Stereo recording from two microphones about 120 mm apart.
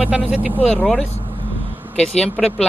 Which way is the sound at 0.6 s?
Centre (ahead or behind).